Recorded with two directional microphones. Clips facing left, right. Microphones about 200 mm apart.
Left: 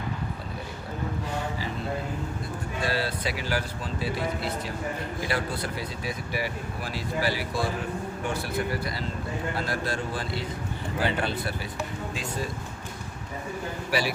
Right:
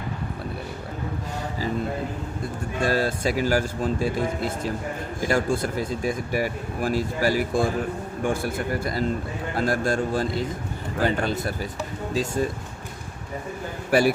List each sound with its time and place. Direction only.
2.8 s speech: 45° right (ahead or behind)
13.9 s speech: 50° right (ahead or behind)